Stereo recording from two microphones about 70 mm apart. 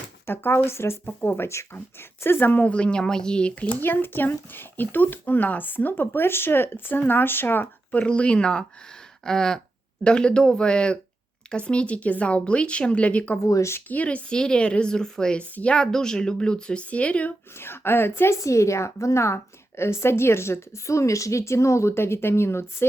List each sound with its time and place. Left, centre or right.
0.3 s speech: left; by 13.4 s centre
13.4 s a woman's voice: left
13.9 s speech: centre
17.6 s speech: left
18.3 s a woman's voice: left